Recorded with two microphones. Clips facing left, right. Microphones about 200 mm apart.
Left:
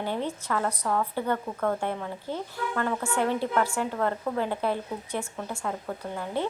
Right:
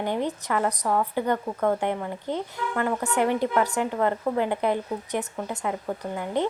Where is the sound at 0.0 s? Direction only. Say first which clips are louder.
Right 3 dB; 15° right (ahead or behind).